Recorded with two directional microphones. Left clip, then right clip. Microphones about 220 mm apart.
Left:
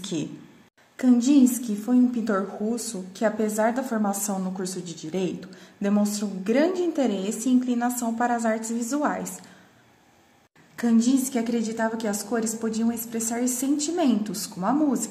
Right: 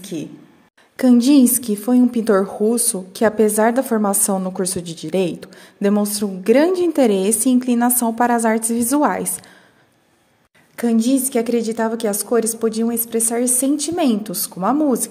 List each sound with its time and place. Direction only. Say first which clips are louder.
0.0 s speech: right 2 dB; 10° left (ahead or behind)
0.9 s a woman's voice: right 7 dB; 45° right (ahead or behind)
10.8 s a woman's voice: right 5 dB; 40° right (ahead or behind)